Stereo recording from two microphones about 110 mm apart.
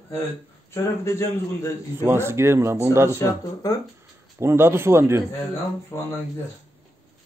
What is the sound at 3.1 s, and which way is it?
Speech, 25° left (ahead or behind).